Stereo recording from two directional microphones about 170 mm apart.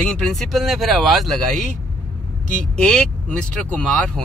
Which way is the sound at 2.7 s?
5° left (ahead or behind).